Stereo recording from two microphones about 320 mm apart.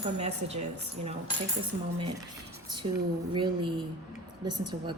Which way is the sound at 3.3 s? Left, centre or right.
Centre.